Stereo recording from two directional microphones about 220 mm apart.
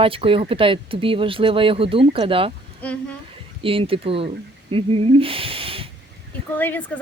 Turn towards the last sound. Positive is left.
turn(degrees=10)  # may be behind; listen again after turning